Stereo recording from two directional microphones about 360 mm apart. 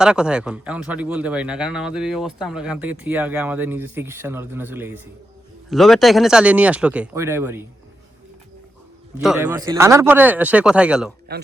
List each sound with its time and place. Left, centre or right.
0.0 s a man's voice: centre
9.2 s a man's voice: centre
11.3 s speech: right